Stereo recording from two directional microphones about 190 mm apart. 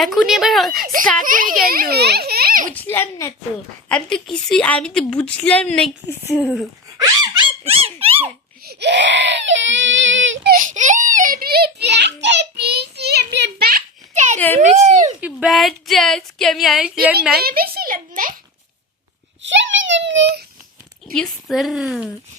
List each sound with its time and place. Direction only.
0.0 s speech: centre (ahead or behind)
1.2 s a child's voice: 45° right (ahead or behind)
2.7 s a woman's voice: 10° left (ahead or behind)
7.0 s squeak: 20° right (ahead or behind)
8.6 s speech: 60° right (ahead or behind); by 10.5 s 75° right (ahead or behind)
10.5 s a child's voice: 45° right (ahead or behind)
14.3 s a woman's voice: 10° left (ahead or behind)
14.6 s speech: 40° right (ahead or behind)
15.2 s speech: 5° right (ahead or behind)
17.3 s a child's voice: 50° right (ahead or behind)
19.4 s speech: 75° right (ahead or behind)
21.1 s speech: centre (ahead or behind)